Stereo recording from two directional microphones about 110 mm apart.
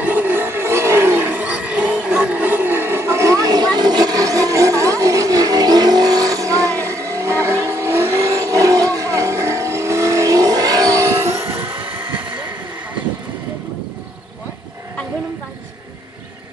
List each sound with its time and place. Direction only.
0.0 s wild animals: 15° right (ahead or behind)
7.4 s vehicle: 25° right (ahead or behind)